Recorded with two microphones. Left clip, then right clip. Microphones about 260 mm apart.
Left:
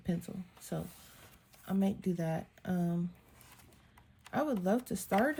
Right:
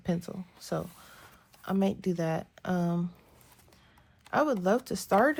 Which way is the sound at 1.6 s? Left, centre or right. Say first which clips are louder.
Right 6 dB; right.